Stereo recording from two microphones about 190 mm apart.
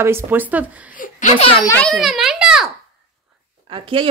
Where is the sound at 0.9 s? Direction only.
45° left (ahead or behind).